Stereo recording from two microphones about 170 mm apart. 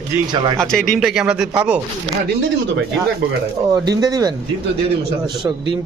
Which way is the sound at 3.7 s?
25° right (ahead or behind).